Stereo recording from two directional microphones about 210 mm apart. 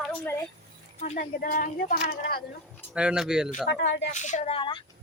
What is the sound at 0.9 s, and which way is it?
Speech, 35° left (ahead or behind).